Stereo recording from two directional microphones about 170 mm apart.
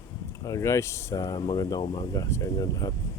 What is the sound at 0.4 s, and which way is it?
Speech, 20° left (ahead or behind).